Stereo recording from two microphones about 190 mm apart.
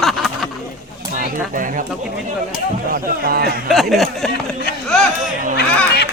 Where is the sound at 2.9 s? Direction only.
55° right (ahead or behind).